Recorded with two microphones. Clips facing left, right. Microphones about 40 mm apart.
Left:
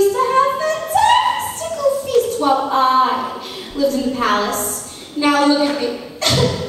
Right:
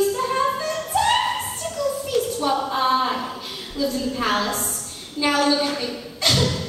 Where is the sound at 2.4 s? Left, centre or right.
Centre.